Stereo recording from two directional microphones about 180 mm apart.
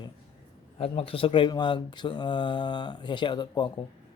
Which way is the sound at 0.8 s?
30° left (ahead or behind).